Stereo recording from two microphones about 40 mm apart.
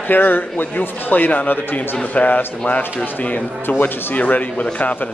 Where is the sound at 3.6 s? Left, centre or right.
Left.